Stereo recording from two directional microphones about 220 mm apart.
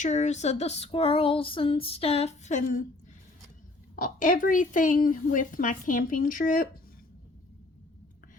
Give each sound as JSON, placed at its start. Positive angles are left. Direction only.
{"t": 0.0, "sound": "female singing", "side_deg": 30}
{"t": 3.9, "sound": "a woman's voice", "side_deg": 40}